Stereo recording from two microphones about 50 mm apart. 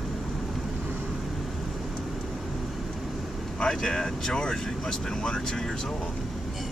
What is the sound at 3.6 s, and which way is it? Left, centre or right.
Speech, centre.